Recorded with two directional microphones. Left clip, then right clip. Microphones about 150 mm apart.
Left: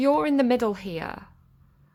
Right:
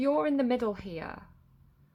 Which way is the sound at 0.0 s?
40° left (ahead or behind).